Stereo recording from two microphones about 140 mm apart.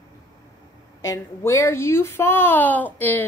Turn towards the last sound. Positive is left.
turn(degrees=15)  # may be behind; listen again after turning